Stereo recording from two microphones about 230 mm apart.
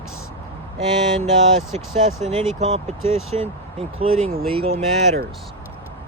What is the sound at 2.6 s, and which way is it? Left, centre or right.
Speech, right.